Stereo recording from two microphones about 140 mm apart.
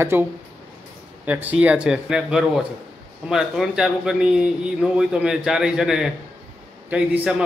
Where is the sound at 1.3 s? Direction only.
10° right (ahead or behind).